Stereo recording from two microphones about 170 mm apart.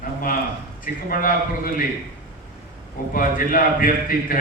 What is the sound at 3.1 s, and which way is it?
A man's voice, 55° left (ahead or behind).